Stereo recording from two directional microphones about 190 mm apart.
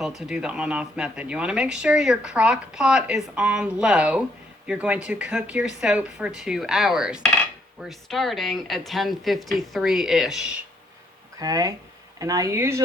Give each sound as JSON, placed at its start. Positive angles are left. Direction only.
{"t": 0.2, "sound": "speech", "side_deg": -5}
{"t": 11.3, "sound": "speech", "side_deg": -20}